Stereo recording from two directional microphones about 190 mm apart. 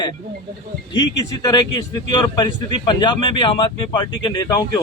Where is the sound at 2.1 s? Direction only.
25° left (ahead or behind).